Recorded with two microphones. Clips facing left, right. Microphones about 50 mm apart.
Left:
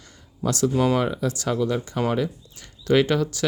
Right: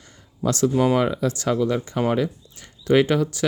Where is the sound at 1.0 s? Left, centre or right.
Right.